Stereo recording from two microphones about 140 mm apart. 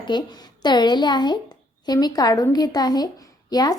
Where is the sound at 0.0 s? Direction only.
30° left (ahead or behind).